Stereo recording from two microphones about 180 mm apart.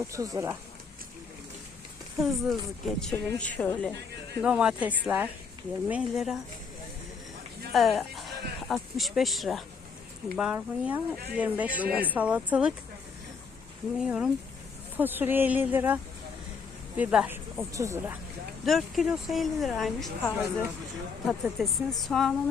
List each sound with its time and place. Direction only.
0.0 s speech: 20° right (ahead or behind)
2.1 s speech: centre (ahead or behind)
4.4 s speech: 5° right (ahead or behind)
7.7 s speech: centre (ahead or behind)
14.0 s speech: 5° right (ahead or behind)
17.0 s speech: 5° right (ahead or behind)
18.6 s speech: centre (ahead or behind)